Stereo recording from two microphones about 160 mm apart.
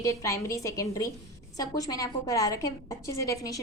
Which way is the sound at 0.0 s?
20° left (ahead or behind).